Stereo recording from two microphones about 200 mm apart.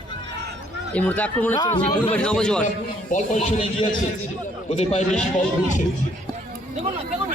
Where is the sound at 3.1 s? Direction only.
40° left (ahead or behind).